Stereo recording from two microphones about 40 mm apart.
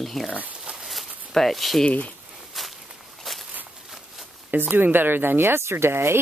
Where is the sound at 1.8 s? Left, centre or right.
Left.